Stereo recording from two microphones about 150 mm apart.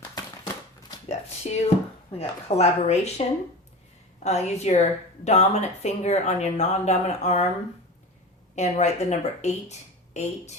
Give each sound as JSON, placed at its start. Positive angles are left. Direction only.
{"t": 0.2, "sound": "a sound", "side_deg": 20}
{"t": 1.0, "sound": "a woman's voice", "side_deg": 45}
{"t": 4.2, "sound": "a woman's voice", "side_deg": 45}
{"t": 8.5, "sound": "a woman's voice", "side_deg": 50}